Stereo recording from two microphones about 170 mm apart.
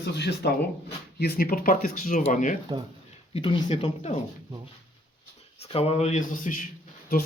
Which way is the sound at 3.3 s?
30° left (ahead or behind).